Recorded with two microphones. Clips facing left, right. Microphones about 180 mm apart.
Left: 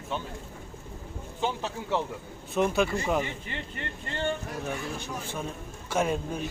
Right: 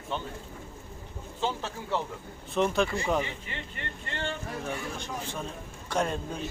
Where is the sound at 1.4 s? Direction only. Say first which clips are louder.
Left 1 dB; 15° left (ahead or behind).